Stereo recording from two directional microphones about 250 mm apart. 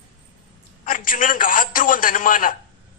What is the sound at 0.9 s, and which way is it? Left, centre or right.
A woman's voice, left.